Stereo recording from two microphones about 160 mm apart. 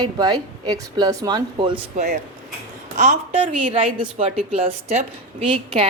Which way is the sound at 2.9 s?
45° right (ahead or behind).